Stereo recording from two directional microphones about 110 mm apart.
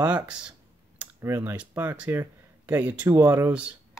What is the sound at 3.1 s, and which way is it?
Speech, 25° right (ahead or behind).